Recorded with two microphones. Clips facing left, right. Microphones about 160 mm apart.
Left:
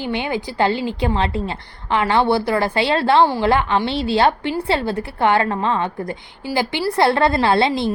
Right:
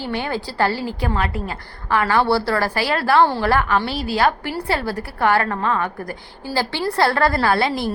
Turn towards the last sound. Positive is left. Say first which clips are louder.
# left 2 dB
turn(degrees=20)  # may be behind; listen again after turning